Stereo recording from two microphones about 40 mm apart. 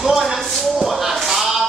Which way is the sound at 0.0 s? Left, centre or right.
Centre.